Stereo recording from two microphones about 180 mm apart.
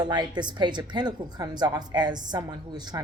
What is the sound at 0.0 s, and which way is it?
A woman's voice, 25° right (ahead or behind).